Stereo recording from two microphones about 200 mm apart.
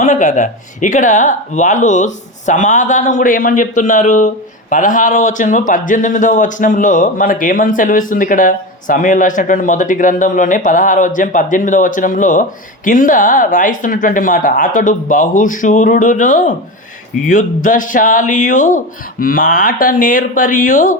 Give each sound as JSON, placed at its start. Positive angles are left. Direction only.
{"t": 0.0, "sound": "speech", "side_deg": 35}